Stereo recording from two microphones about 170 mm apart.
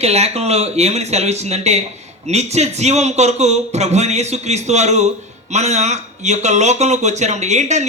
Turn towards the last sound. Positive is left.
turn(degrees=-45)  # may be behind; listen again after turning